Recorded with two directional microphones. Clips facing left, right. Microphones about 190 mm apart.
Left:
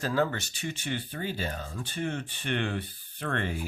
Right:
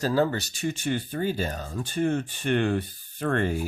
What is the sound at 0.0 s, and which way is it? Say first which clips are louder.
Speech: right 4 dB; 35° right (ahead or behind).